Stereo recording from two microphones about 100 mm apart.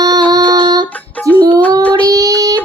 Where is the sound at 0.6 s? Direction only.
45° right (ahead or behind).